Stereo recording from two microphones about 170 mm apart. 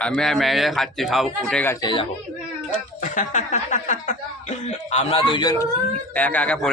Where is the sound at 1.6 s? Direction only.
15° left (ahead or behind).